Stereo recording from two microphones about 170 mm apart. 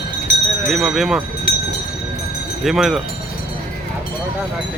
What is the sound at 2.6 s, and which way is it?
Speech, centre (ahead or behind).